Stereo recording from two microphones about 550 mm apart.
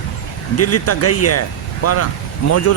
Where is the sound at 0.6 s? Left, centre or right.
Left.